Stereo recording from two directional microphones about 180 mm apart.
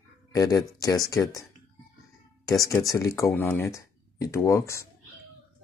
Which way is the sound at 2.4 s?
20° left (ahead or behind).